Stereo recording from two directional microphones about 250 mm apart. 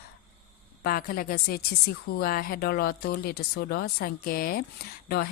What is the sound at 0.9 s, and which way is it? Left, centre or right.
A woman's voice, left.